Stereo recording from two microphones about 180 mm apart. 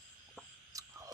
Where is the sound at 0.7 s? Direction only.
20° right (ahead or behind).